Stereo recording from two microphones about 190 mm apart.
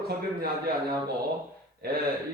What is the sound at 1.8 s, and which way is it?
Speech, 55° right (ahead or behind).